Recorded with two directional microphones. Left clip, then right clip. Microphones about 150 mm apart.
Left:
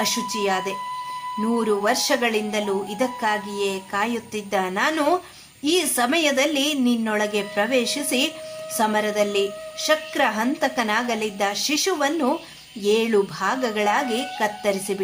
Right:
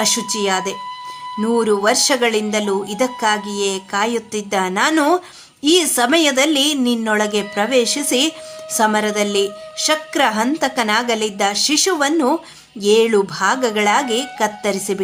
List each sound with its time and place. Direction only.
0.0 s a woman's voice: 30° right (ahead or behind)